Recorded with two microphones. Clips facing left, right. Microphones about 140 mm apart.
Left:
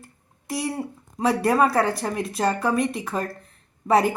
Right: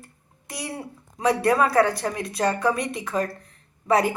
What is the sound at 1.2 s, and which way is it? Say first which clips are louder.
Speech: left 1 dB; 10° left (ahead or behind).